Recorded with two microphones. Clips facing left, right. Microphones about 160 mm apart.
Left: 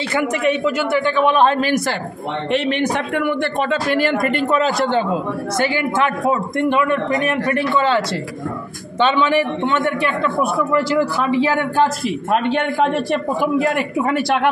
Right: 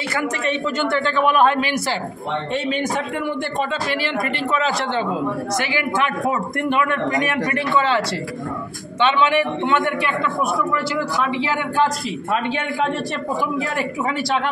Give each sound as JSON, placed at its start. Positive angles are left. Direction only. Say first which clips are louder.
{"t": 0.1, "sound": "a man's voice", "louder": "left 5 dB", "side_deg": 20}
{"t": 1.3, "sound": "a man's voice", "louder": "even", "side_deg": 30}
{"t": 2.6, "sound": "a man's voice", "louder": "left 3 dB", "side_deg": 75}
{"t": 3.9, "sound": "speech", "louder": "left 6 dB", "side_deg": 50}
{"t": 9.0, "sound": "a man's voice", "louder": "left 2 dB", "side_deg": 35}
{"t": 13.4, "sound": "speech", "louder": "left 5 dB", "side_deg": 60}